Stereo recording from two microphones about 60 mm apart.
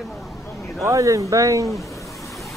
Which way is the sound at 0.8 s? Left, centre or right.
Right.